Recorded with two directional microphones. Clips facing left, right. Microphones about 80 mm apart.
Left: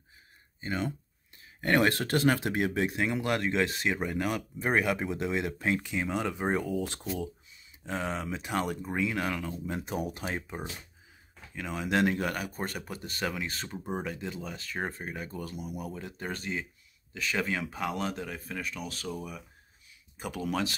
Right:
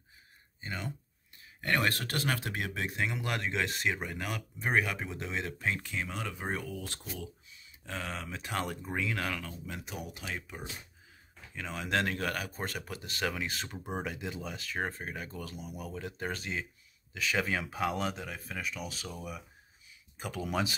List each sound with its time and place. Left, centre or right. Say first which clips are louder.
0.6 s speech: left 7 dB; left
1.6 s speech: left 5 dB; left; by 9.6 s centre
9.7 s speech: left 10 dB; left
11.5 s speech: left 3 dB; centre
20.2 s speech: left 3 dB; centre